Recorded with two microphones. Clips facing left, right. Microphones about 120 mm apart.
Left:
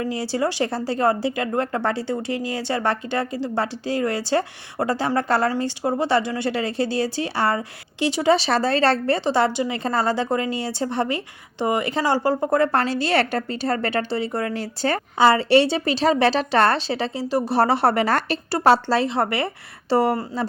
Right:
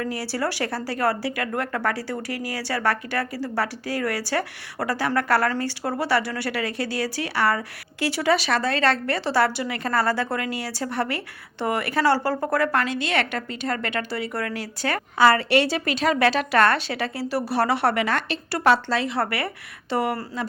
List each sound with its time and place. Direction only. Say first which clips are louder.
0.0 s a woman's voice: left 3 dB; 20° left (ahead or behind)